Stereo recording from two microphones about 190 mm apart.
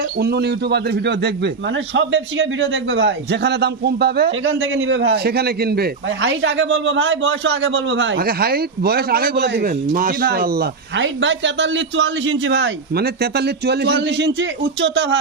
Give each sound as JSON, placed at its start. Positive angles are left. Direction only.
{"t": 0.2, "sound": "speech", "side_deg": -60}
{"t": 4.4, "sound": "a man's voice", "side_deg": -90}
{"t": 8.2, "sound": "speech", "side_deg": -55}